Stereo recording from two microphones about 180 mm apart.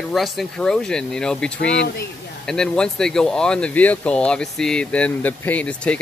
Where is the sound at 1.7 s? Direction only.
75° left (ahead or behind).